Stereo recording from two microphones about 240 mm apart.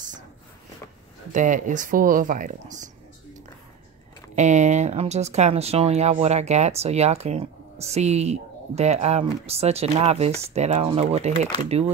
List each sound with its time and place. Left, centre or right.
1.3 s speech: right
4.4 s speech: right